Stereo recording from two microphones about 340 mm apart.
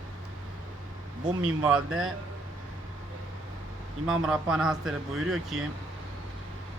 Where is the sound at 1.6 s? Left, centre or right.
Centre.